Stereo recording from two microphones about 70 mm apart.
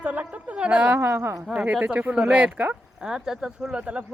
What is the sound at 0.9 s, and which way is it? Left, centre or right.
Speech, right.